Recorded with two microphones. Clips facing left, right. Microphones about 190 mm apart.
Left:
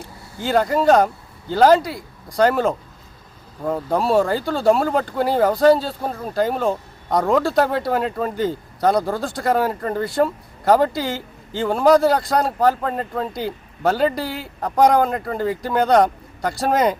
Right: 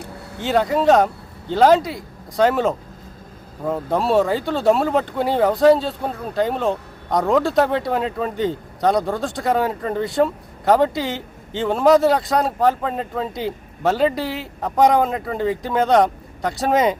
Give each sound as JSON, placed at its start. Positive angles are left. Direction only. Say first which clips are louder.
{"t": 0.2, "sound": "vehicle", "louder": "right 3 dB", "side_deg": -65}
{"t": 0.4, "sound": "speech", "louder": "even", "side_deg": 0}